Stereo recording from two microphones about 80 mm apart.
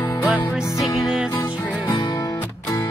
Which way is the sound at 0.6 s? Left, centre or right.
Left.